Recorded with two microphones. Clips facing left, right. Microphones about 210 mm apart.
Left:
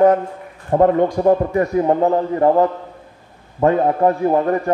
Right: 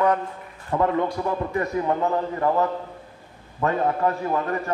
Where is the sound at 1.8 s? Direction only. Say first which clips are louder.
Left 7 dB; 35° left (ahead or behind).